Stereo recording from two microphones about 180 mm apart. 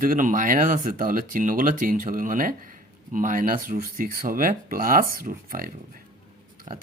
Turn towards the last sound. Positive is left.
turn(degrees=-45)  # may be behind; listen again after turning